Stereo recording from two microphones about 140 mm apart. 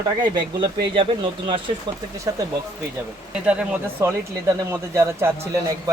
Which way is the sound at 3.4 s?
10° right (ahead or behind).